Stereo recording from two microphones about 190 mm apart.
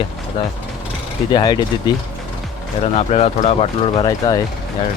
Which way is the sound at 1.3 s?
25° left (ahead or behind).